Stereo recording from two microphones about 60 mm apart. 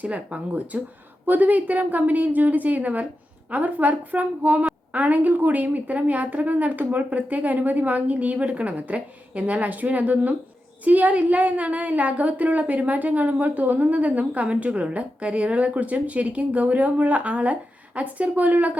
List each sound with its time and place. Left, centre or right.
0.0 s a woman's voice: right